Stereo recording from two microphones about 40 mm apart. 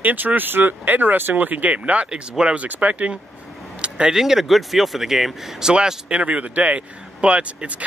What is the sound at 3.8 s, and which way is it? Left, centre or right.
Vehicle, right.